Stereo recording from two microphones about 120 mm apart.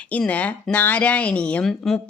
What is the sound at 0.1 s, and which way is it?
Speech, 10° left (ahead or behind).